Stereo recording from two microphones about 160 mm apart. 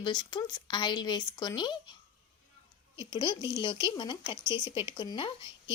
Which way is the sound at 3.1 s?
30° left (ahead or behind).